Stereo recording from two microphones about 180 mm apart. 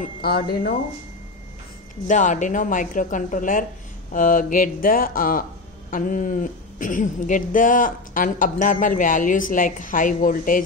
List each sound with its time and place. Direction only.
0.0 s speech: 60° left (ahead or behind)
2.0 s speech: 45° left (ahead or behind)